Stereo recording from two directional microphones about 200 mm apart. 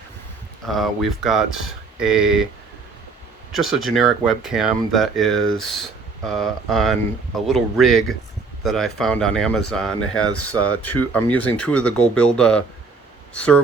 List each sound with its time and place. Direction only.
0.7 s speech: centre (ahead or behind)
3.5 s speech: centre (ahead or behind)
10.2 s speech: 90° left
10.8 s speech: 10° left (ahead or behind)